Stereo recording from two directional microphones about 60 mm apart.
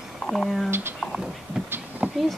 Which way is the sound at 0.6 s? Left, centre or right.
Right.